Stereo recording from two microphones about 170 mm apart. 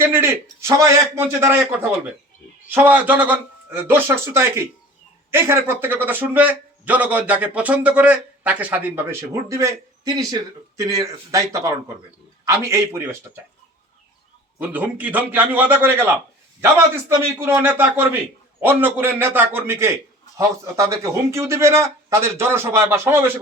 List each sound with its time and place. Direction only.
0.0 s a man's voice: 15° right (ahead or behind)
14.6 s a man's voice: 10° right (ahead or behind)
17.4 s a man's voice: 15° right (ahead or behind)